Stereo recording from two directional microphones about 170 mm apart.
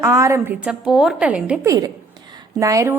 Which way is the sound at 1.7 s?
20° right (ahead or behind).